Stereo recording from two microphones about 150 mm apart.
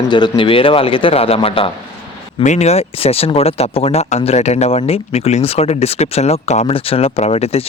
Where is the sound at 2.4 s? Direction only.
50° left (ahead or behind).